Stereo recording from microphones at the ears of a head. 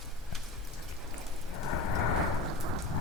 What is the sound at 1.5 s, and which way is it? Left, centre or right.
Thunder, left.